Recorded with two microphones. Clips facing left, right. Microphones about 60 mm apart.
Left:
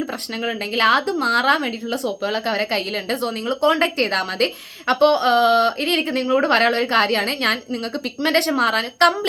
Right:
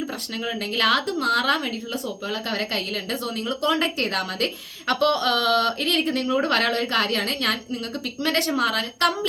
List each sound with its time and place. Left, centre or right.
0.4 s a woman's voice: left
2.0 s speech: left
2.5 s a woman's voice: left